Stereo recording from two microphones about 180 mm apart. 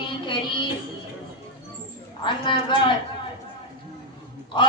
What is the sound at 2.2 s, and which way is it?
Speech, 25° left (ahead or behind).